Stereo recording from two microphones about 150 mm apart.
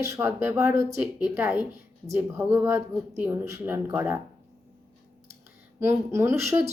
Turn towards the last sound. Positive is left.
turn(degrees=-20)  # may be behind; listen again after turning